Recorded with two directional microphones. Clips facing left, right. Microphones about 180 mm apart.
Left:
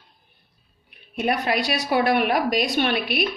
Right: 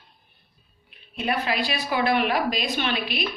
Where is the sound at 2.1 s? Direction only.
50° left (ahead or behind).